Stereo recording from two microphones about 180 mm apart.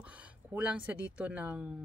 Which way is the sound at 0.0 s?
5° right (ahead or behind).